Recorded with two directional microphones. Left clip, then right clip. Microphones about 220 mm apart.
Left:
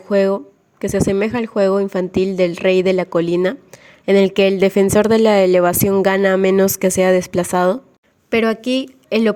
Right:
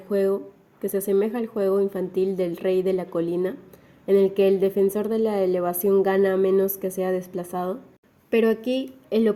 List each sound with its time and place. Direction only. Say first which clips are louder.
0.1 s a woman's voice: left 7 dB; 45° left (ahead or behind)